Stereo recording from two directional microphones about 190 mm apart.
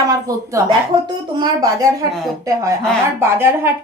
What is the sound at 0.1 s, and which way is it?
Speech, 20° right (ahead or behind).